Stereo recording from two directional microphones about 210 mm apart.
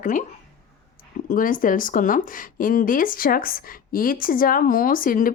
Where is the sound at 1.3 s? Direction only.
40° left (ahead or behind).